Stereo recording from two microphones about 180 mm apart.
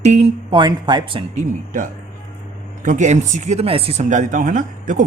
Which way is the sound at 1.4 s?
45° right (ahead or behind).